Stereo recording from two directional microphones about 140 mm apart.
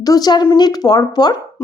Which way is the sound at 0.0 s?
25° left (ahead or behind).